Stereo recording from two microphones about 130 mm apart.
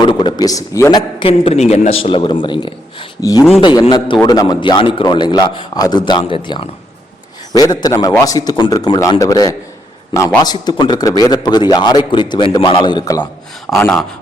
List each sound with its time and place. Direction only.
0.0 s a man's voice: 35° left (ahead or behind)
1.2 s a man's voice: 45° left (ahead or behind)
3.2 s a man's voice: 30° left (ahead or behind)
7.5 s a man's voice: 30° left (ahead or behind)
13.7 s speech: 15° left (ahead or behind)